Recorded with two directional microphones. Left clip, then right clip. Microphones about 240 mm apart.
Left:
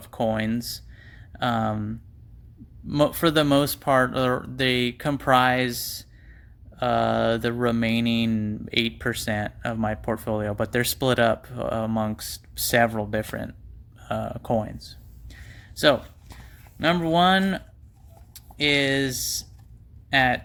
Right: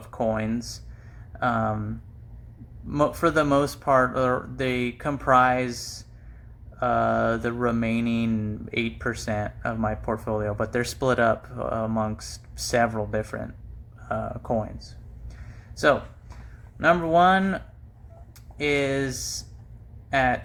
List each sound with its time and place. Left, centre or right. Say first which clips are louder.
0.1 s speech: left 1 dB; left
2.9 s speech: left 1 dB; left
5.6 s speech: left 3 dB; left
6.8 s speech: even; left
16.8 s speech: right 2 dB; left
18.6 s speech: left 2 dB; left